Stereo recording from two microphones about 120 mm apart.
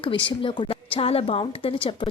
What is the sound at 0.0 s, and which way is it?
A woman's voice, 45° left (ahead or behind).